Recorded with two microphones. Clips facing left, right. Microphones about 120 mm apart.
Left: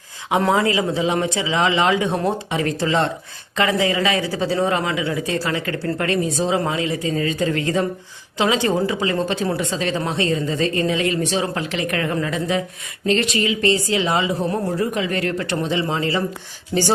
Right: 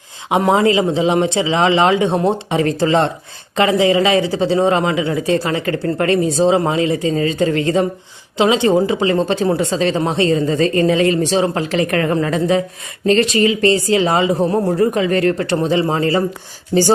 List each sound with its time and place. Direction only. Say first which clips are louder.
0.3 s a woman's voice: right 4 dB; 20° right (ahead or behind); by 16.2 s 40° right (ahead or behind)
16.7 s speech: right 6 dB; 25° right (ahead or behind)